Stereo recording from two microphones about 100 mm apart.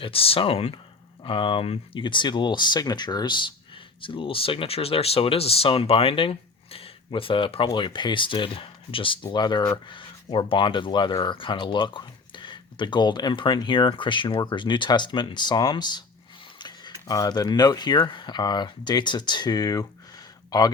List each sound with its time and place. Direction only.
0.0 s speech: 70° left (ahead or behind)
1.2 s speech: 60° left (ahead or behind)
4.0 s speech: 60° left (ahead or behind)
7.7 s speech: 50° left (ahead or behind)